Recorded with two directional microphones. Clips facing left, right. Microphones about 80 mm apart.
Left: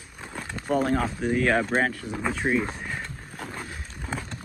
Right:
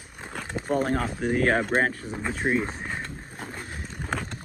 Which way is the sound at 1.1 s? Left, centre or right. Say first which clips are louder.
Even; right.